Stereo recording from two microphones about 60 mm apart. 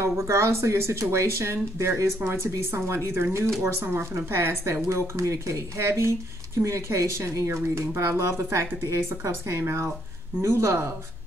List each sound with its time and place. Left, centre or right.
0.0 s speech: right